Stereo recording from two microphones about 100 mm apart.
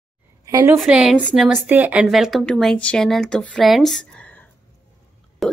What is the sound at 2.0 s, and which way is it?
Speech, centre (ahead or behind).